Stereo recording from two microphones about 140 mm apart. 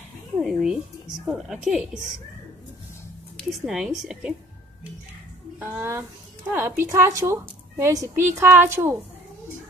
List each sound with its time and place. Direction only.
0.4 s speech: centre (ahead or behind)
3.3 s speech: 5° right (ahead or behind)
5.6 s a woman's voice: 15° right (ahead or behind)